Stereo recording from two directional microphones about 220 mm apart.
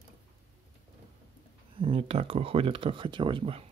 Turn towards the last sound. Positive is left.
turn(degrees=-25)  # may be behind; listen again after turning